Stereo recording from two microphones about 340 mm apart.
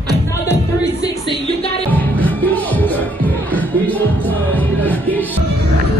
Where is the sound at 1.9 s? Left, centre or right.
Centre.